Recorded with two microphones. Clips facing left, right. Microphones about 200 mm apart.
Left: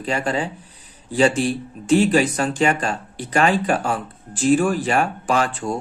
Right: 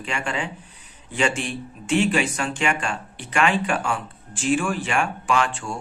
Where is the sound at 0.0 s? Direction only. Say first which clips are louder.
Left 6 dB; 35° left (ahead or behind).